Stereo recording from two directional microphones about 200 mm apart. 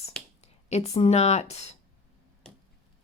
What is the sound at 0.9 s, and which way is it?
Speech, 30° left (ahead or behind).